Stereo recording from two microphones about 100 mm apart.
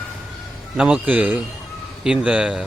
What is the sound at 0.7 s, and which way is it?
Speech, 10° right (ahead or behind).